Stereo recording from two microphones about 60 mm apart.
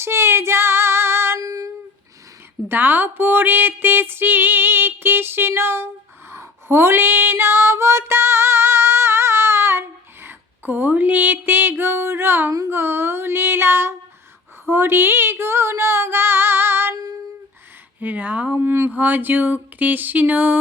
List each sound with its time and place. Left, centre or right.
0.0 s child singing: right
1.4 s female singing: right
2.6 s a sound: right
6.3 s female singing: right
12.5 s speech: right
12.7 s a sound: right
14.7 s female singing: right
16.9 s female singing: right
18.0 s speech: right
18.5 s a sound: right